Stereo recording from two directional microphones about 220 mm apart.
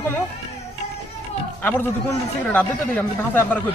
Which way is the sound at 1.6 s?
10° left (ahead or behind).